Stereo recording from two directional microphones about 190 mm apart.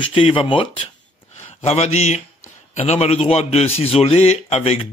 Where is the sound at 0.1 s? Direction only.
30° left (ahead or behind).